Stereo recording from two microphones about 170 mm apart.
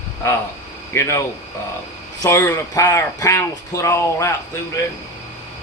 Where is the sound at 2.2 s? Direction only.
15° left (ahead or behind).